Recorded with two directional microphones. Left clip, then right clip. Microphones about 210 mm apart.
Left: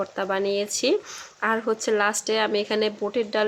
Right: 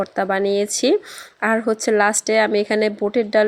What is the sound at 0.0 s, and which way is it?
Speech, 30° right (ahead or behind).